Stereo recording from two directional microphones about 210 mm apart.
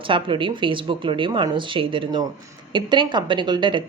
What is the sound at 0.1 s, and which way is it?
A woman's voice, 25° right (ahead or behind).